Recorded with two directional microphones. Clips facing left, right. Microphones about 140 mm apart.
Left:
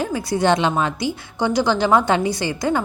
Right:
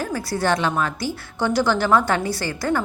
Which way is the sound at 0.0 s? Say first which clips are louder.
Left 4 dB; 20° left (ahead or behind).